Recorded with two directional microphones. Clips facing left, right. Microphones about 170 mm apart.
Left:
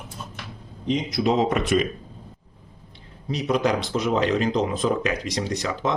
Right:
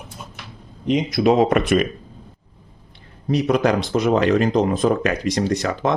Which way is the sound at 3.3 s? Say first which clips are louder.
Right 5 dB; 55° right (ahead or behind).